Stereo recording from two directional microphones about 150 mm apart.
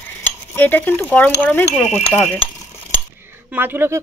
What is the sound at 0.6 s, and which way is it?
Speech, 15° left (ahead or behind).